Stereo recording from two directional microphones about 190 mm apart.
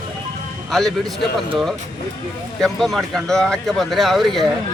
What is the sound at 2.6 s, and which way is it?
A man's voice, centre (ahead or behind).